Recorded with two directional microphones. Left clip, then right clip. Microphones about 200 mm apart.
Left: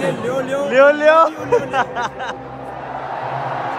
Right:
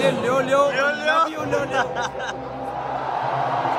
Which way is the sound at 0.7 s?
5° left (ahead or behind).